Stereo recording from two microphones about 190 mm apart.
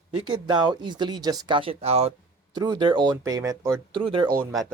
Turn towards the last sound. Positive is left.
turn(degrees=0)  # may be behind; listen again after turning